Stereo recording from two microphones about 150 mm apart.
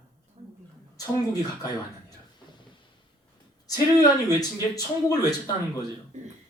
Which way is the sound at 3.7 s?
25° left (ahead or behind).